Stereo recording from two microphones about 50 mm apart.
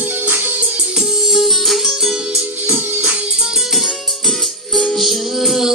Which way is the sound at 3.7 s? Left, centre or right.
Centre.